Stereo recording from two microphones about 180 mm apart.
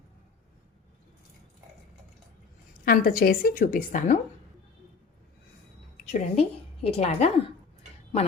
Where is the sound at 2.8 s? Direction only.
50° left (ahead or behind).